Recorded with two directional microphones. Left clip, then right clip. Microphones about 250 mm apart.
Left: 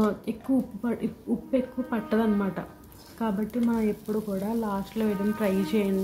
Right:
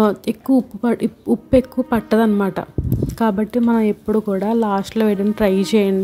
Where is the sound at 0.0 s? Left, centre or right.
Right.